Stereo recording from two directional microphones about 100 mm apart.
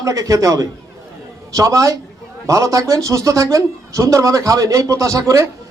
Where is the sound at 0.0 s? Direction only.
35° right (ahead or behind).